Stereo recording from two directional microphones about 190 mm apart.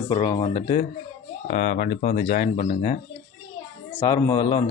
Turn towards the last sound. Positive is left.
turn(degrees=20)  # may be behind; listen again after turning